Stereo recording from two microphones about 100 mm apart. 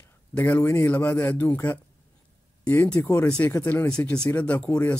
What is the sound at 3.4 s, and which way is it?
Speech, 20° left (ahead or behind).